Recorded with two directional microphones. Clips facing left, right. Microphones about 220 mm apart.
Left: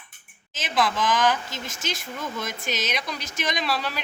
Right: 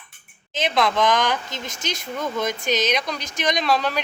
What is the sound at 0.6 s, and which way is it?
Speech, 5° left (ahead or behind).